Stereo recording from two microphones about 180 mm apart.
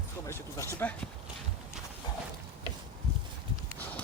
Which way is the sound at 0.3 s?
15° left (ahead or behind).